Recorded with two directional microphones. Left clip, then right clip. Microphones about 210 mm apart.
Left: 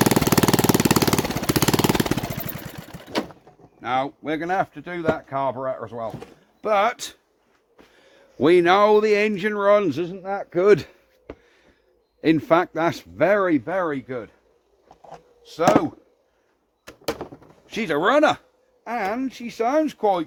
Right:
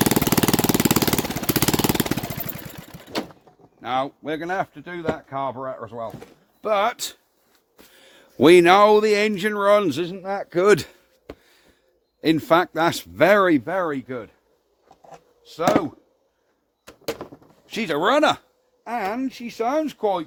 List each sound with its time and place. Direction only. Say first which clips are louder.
0.0 s jackhammer: left 1 dB; centre (ahead or behind)
3.8 s speech: left 1 dB; 25° right (ahead or behind)
6.9 s speech: right 2 dB; 35° right (ahead or behind)
7.9 s a sound: right 5 dB; 60° right (ahead or behind)
8.7 s speech: right 2 dB; 30° right (ahead or behind)
13.1 s speech: right 3 dB; 50° right (ahead or behind)
14.8 s a sound: left 2 dB; centre (ahead or behind)
15.5 s speech: left 2 dB; 20° right (ahead or behind)
16.8 s a sound: left 2 dB; centre (ahead or behind)
17.7 s speech: even; 35° right (ahead or behind); by 20.2 s 20° right (ahead or behind)